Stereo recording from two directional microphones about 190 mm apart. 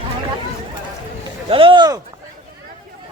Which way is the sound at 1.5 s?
30° right (ahead or behind).